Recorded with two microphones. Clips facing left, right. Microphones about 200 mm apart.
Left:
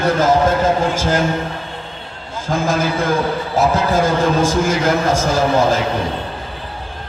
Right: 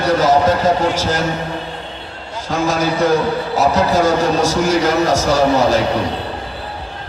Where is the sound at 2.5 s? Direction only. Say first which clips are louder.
Right 1 dB; 50° left (ahead or behind).